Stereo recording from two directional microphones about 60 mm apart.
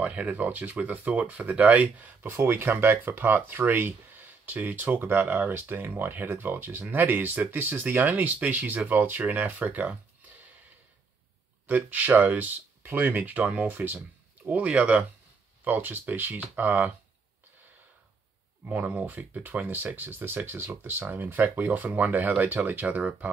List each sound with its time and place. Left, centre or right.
0.0 s speech: right
11.6 s speech: right
18.7 s speech: right